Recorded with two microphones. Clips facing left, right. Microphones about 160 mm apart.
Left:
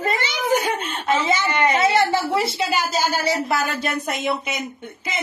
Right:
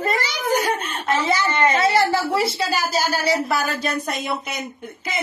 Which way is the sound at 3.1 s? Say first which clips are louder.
Right 1 dB; 20° left (ahead or behind).